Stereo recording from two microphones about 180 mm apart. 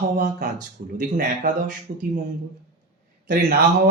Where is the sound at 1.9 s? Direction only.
50° right (ahead or behind).